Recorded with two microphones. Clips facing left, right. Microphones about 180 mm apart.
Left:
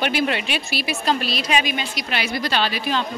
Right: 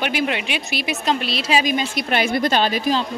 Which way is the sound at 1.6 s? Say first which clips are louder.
Right 5 dB; 40° right (ahead or behind).